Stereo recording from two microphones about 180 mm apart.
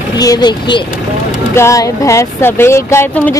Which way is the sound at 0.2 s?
20° left (ahead or behind).